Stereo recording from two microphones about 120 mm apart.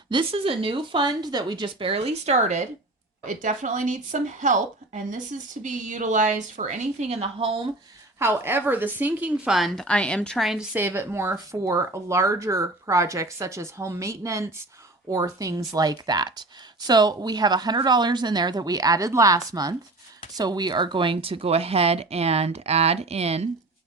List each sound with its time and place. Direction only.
0.1 s speech: 50° right (ahead or behind); by 2.6 s 70° right (ahead or behind)
3.2 s speech: 90° right; by 7.7 s 45° right (ahead or behind)
8.2 s a woman's voice: 20° right (ahead or behind)
10.8 s speech: 20° right (ahead or behind); by 23.5 s 60° right (ahead or behind)